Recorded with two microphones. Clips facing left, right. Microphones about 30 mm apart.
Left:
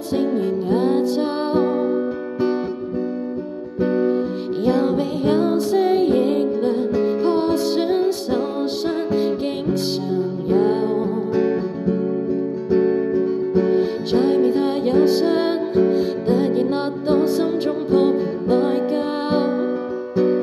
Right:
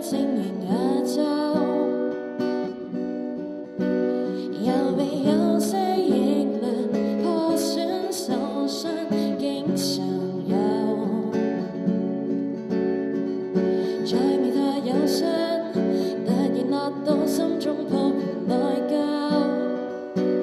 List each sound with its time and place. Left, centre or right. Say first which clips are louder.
0.1 s music: left 5 dB; centre
3.8 s music: left 4 dB; left
11.3 s music: left 5 dB; left
12.7 s music: left 7 dB; centre